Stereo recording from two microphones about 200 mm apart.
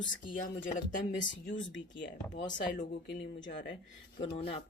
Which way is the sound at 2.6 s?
50° left (ahead or behind).